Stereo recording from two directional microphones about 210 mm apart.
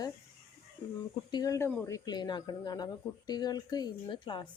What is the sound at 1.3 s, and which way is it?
A woman's voice, 15° left (ahead or behind).